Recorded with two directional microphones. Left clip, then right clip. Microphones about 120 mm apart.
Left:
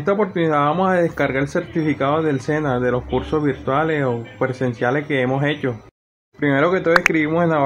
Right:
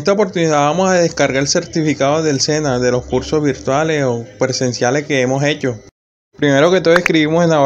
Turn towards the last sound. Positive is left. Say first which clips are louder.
# right 5 dB
turn(degrees=-40)  # may be behind; listen again after turning